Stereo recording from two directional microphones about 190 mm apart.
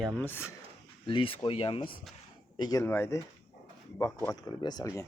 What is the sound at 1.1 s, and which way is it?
Speech, 30° left (ahead or behind).